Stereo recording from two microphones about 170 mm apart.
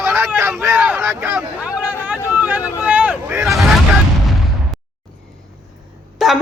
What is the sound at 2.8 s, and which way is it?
Boat, 10° right (ahead or behind).